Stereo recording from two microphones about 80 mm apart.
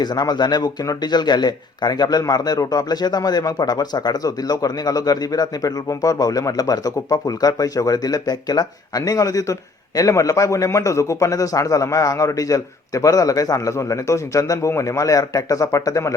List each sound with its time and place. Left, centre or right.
0.0 s a man's voice: left